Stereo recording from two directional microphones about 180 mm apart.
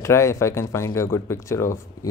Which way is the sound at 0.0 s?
15° left (ahead or behind).